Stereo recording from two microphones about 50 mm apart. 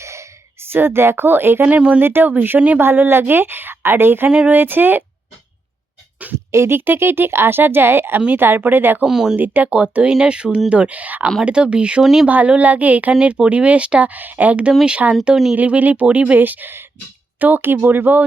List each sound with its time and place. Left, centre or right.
0.0 s a sound: right
0.6 s a woman's voice: right
1.6 s speech: right
2.0 s a woman's voice: right
6.5 s a woman's voice: right
9.0 s speech: centre
9.3 s speech: right
9.6 s speech: right
11.4 s speech: right
12.0 s speech: centre
12.3 s speech: right